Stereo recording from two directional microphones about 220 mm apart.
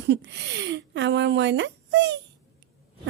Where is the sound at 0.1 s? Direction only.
50° right (ahead or behind).